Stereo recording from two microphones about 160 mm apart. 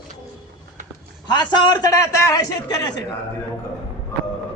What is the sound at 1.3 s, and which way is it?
A man's voice, 25° left (ahead or behind).